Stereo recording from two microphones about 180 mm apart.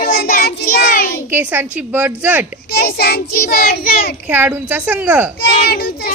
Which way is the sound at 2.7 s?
60° left (ahead or behind).